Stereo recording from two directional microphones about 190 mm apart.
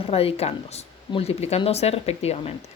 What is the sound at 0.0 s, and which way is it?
Speech, 30° left (ahead or behind).